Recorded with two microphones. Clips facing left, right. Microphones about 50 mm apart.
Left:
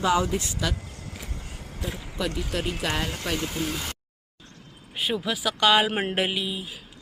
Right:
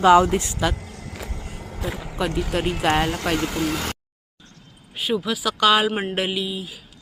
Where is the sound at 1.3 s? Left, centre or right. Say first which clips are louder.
Right 5 dB; right.